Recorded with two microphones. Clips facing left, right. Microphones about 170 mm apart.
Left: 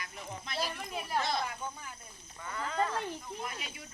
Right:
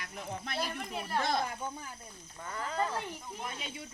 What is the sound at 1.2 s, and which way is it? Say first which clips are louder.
Speech: right 5 dB; 50° right (ahead or behind).